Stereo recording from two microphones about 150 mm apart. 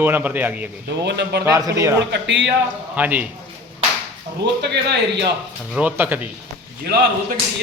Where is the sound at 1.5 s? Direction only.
20° right (ahead or behind).